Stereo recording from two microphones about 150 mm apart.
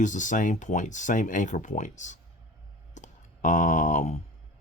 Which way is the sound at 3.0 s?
55° left (ahead or behind).